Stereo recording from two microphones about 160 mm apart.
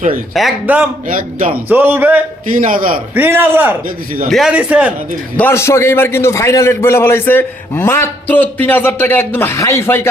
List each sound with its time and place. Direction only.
0.3 s a man's voice: centre (ahead or behind)
1.0 s a man's voice: 55° right (ahead or behind)
1.5 s a man's voice: 10° right (ahead or behind)
2.5 s a man's voice: 55° right (ahead or behind)
3.2 s a man's voice: 15° right (ahead or behind)
3.8 s a man's voice: 60° right (ahead or behind)
4.3 s a man's voice: centre (ahead or behind)
5.4 s a man's voice: 15° left (ahead or behind)